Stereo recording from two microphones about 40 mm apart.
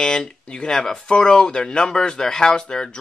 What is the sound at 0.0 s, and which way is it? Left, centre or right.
Speech, centre.